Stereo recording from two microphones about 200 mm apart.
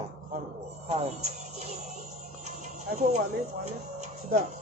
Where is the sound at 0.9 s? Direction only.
30° right (ahead or behind).